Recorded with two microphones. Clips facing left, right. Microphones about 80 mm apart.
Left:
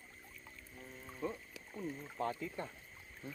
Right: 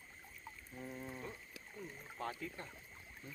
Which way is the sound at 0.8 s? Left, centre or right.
Right.